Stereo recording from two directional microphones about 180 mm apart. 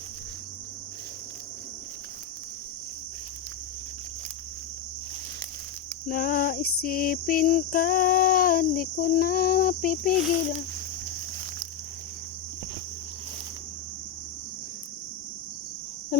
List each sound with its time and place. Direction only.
6.1 s female singing: 50° left (ahead or behind)